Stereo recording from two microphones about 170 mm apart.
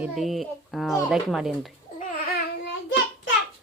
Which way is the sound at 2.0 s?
60° left (ahead or behind).